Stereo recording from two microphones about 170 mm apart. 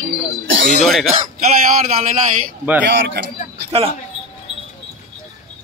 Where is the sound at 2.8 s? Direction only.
90° right.